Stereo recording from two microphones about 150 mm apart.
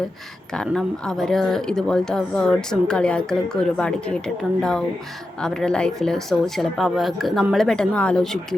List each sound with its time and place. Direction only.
0.5 s speech: 5° left (ahead or behind)
5.4 s speech: 5° left (ahead or behind)